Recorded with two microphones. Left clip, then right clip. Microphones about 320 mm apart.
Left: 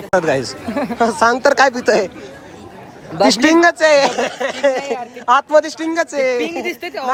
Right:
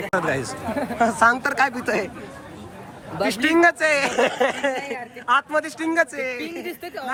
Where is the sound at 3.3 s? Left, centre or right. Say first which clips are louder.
Left 6 dB; centre.